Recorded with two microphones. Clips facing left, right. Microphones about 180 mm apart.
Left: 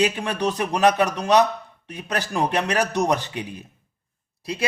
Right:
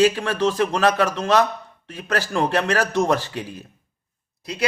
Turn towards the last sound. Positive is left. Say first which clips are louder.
# right 1 dB
turn(degrees=25)  # may be behind; listen again after turning